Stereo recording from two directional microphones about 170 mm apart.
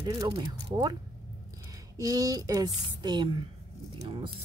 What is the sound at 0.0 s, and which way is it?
Speech, 20° right (ahead or behind).